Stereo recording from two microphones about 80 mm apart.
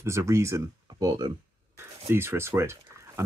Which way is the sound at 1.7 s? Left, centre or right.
Right.